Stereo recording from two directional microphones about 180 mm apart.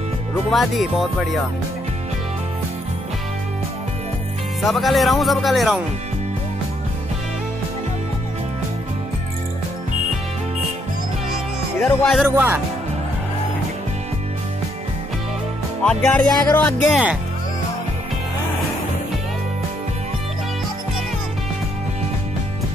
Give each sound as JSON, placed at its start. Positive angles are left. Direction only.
{"t": 0.5, "sound": "speech", "side_deg": 0}
{"t": 4.6, "sound": "speech", "side_deg": 0}
{"t": 11.8, "sound": "speech", "side_deg": 5}
{"t": 12.3, "sound": "speech", "side_deg": -10}
{"t": 15.8, "sound": "speech", "side_deg": 5}